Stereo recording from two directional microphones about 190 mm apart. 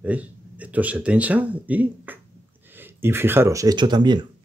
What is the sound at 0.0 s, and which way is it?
Speech, 5° right (ahead or behind).